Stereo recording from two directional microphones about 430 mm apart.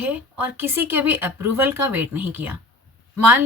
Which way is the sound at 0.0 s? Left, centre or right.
Centre.